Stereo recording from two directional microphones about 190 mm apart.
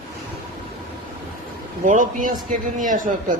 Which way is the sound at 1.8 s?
45° right (ahead or behind).